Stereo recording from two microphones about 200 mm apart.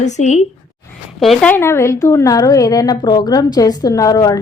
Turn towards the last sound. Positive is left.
turn(degrees=15)  # may be behind; listen again after turning